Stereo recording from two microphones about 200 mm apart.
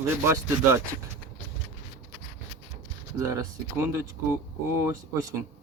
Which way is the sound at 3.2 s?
15° right (ahead or behind).